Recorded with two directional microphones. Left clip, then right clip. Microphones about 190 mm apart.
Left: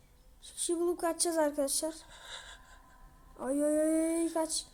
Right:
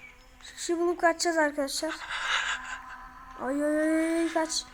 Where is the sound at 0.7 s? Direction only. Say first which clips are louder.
Right 7 dB; 5° left (ahead or behind).